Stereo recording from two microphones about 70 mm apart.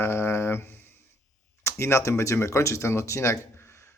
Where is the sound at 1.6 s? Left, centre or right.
Left.